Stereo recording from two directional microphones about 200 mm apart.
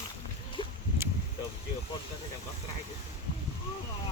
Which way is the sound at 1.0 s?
10° right (ahead or behind).